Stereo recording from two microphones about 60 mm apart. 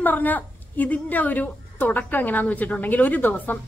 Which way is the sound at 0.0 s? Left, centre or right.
Left.